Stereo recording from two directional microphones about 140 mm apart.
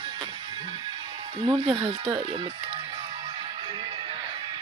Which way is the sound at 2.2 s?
40° right (ahead or behind).